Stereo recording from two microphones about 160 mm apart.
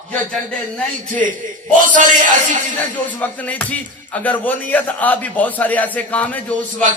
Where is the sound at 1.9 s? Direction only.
55° right (ahead or behind).